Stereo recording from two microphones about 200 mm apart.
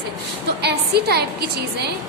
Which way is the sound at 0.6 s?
55° right (ahead or behind).